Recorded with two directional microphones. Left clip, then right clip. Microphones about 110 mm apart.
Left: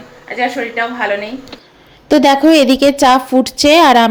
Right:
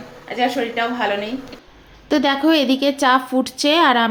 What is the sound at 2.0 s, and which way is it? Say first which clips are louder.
Speech: left 8 dB; 50° left (ahead or behind).